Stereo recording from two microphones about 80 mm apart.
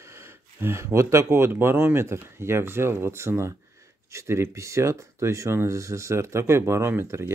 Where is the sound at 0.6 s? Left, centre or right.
Right.